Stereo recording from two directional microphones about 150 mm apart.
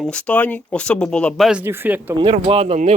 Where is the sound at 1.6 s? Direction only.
15° right (ahead or behind).